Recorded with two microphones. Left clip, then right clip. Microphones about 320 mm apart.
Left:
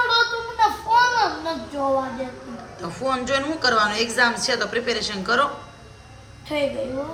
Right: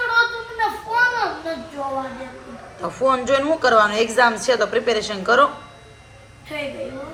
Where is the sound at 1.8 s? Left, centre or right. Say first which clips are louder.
Left 5 dB; centre.